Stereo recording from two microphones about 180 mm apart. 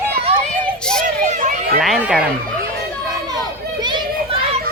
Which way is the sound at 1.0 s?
45° right (ahead or behind).